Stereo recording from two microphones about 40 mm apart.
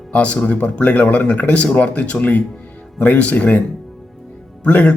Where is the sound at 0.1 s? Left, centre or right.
Left.